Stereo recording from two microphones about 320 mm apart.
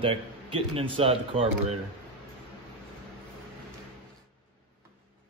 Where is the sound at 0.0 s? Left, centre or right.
Centre.